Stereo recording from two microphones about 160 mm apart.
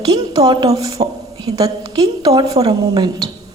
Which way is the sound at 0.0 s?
25° right (ahead or behind).